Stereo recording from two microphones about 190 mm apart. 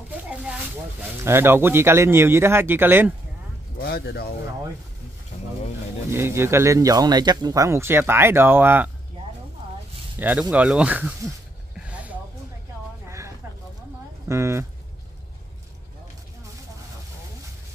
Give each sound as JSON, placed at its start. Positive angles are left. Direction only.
{"t": 0.3, "sound": "a sound", "side_deg": -5}
{"t": 1.2, "sound": "speech", "side_deg": -10}
{"t": 3.7, "sound": "speech", "side_deg": 60}
{"t": 6.0, "sound": "speech", "side_deg": -10}
{"t": 10.1, "sound": "speech", "side_deg": -10}
{"t": 11.9, "sound": "a sound", "side_deg": -5}
{"t": 14.2, "sound": "speech", "side_deg": -15}